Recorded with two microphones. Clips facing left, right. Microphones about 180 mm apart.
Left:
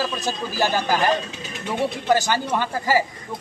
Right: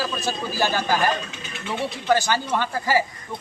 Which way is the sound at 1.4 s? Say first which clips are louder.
Left 2 dB; 40° left (ahead or behind).